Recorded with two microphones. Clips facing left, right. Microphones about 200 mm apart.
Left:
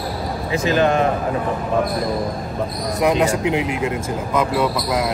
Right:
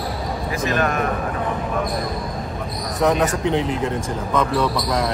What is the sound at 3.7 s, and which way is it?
Speech, 10° left (ahead or behind).